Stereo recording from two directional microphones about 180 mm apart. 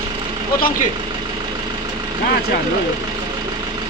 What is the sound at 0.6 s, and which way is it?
Speech, 55° left (ahead or behind).